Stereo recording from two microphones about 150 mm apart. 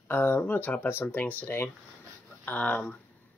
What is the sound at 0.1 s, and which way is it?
Speech, 10° left (ahead or behind).